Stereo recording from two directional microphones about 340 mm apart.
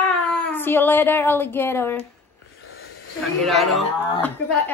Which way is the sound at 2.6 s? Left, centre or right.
Left.